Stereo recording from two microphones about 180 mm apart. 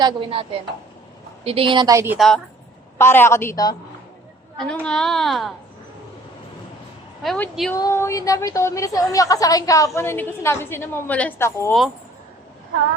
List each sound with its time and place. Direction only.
0.0 s a woman's voice: 30° right (ahead or behind)
1.5 s a woman's voice: 30° right (ahead or behind)
2.1 s a woman's voice: centre (ahead or behind)
3.0 s a woman's voice: 15° left (ahead or behind)
4.5 s a woman's voice: 5° left (ahead or behind)
7.2 s a woman's voice: 5° left (ahead or behind)
7.8 s a woman's voice: 15° left (ahead or behind)